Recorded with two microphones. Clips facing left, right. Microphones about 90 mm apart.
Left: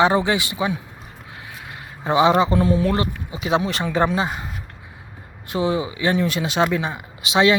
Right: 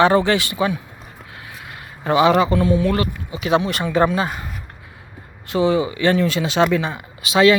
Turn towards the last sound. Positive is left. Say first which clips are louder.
# right 3 dB
turn(degrees=20)  # may be behind; listen again after turning